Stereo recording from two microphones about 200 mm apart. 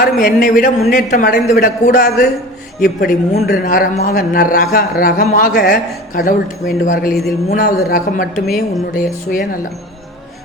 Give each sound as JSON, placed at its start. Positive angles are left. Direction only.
{"t": 0.0, "sound": "a man's voice", "side_deg": 45}
{"t": 8.4, "sound": "speech", "side_deg": 0}
{"t": 9.3, "sound": "a man's voice", "side_deg": 50}